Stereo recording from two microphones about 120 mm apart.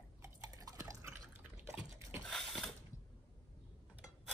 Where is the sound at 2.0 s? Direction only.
20° right (ahead or behind).